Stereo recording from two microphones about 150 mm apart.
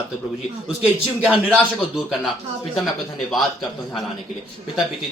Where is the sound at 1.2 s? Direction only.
5° right (ahead or behind).